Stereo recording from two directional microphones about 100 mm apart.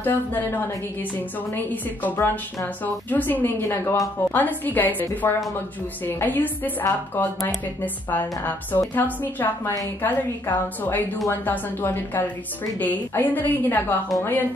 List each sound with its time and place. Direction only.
0.0 s a woman's voice: 20° left (ahead or behind)
4.3 s a woman's voice: 20° left (ahead or behind)